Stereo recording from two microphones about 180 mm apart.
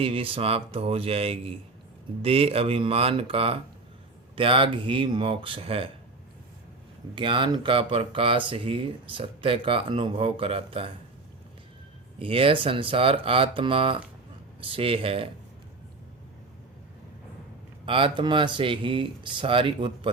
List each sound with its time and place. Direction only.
0.0 s speech: 30° right (ahead or behind)
7.2 s speech: 30° right (ahead or behind)
12.2 s speech: 30° right (ahead or behind)
17.8 s speech: 30° right (ahead or behind)